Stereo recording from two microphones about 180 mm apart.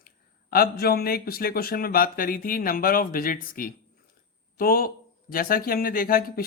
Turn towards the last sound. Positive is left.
turn(degrees=55)  # may be behind; listen again after turning